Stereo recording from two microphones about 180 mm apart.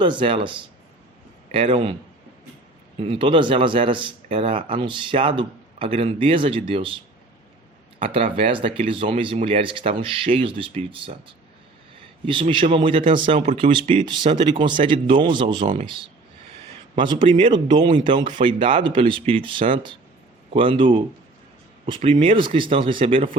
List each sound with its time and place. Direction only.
0.0 s speech: 25° right (ahead or behind)
3.0 s speech: 30° right (ahead or behind)
7.9 s speech: 30° right (ahead or behind)
12.2 s speech: 25° right (ahead or behind)
15.6 s speech: 45° right (ahead or behind)
16.9 s speech: 25° right (ahead or behind)